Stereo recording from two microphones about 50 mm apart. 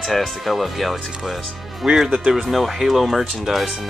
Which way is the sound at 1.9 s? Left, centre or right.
Centre.